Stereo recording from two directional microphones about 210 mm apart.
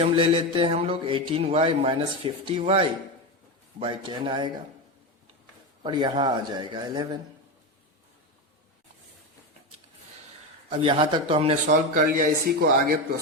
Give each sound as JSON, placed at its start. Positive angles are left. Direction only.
{"t": 0.0, "sound": "a man's voice", "side_deg": -25}
{"t": 5.8, "sound": "a man's voice", "side_deg": -20}
{"t": 10.7, "sound": "a man's voice", "side_deg": -25}
{"t": 11.7, "sound": "speech", "side_deg": -45}